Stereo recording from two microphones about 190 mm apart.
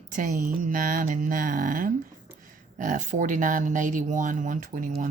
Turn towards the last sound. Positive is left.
turn(degrees=-45)  # may be behind; listen again after turning